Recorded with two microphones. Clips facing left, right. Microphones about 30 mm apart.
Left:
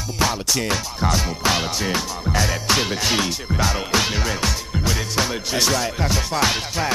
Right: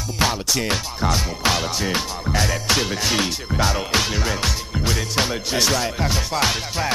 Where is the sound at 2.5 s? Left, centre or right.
Centre.